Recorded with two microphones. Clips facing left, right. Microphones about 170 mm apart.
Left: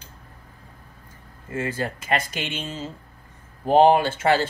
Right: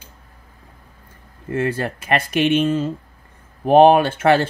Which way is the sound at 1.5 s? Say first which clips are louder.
Right 6 dB; 60° right (ahead or behind).